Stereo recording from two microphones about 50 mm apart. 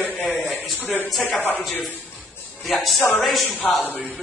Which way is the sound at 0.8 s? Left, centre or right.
Left.